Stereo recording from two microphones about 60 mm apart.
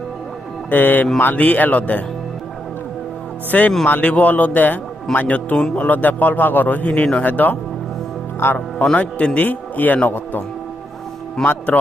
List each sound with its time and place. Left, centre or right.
0.7 s a man's voice: left
3.5 s a man's voice: left
9.0 s a man's voice: left
11.4 s a man's voice: left